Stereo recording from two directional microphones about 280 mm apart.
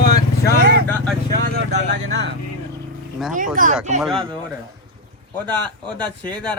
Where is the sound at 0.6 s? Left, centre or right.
Right.